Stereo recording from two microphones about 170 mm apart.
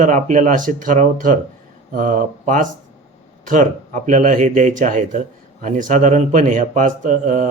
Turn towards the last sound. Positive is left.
turn(degrees=-50)  # may be behind; listen again after turning